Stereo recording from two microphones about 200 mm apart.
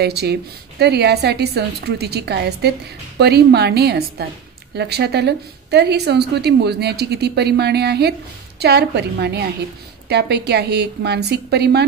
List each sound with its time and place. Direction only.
0.0 s a woman's voice: 55° right (ahead or behind)